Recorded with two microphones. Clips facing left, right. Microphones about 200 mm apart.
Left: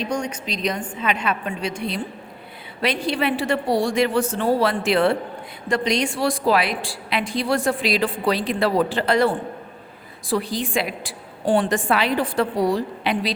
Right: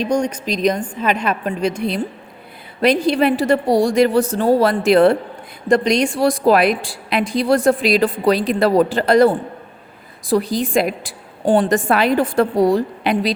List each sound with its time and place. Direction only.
0.2 s a woman's voice: 40° right (ahead or behind)
2.8 s a woman's voice: 40° right (ahead or behind)